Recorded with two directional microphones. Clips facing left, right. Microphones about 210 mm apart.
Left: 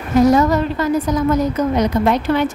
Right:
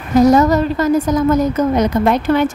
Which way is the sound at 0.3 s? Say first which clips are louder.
Right 2 dB; 40° right (ahead or behind).